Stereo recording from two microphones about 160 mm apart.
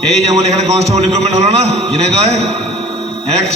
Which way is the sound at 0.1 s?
40° right (ahead or behind).